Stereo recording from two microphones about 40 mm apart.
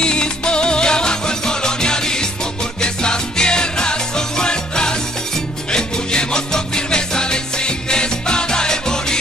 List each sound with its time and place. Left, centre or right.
0.0 s music: left